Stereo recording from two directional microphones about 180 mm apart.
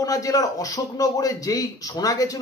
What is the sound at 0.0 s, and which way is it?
Speech, 20° left (ahead or behind).